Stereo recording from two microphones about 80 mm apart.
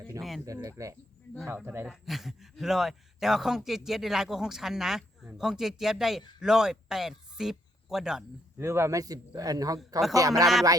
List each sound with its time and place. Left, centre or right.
0.2 s speech: centre
0.4 s a man's voice: right
1.5 s speech: right
1.9 s speech: centre
8.5 s speech: right
9.0 s a man's voice: right